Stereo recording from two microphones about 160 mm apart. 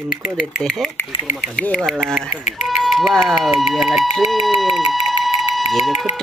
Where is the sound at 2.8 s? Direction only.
Centre (ahead or behind).